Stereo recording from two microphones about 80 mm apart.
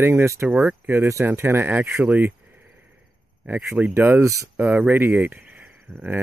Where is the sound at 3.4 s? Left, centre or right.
Right.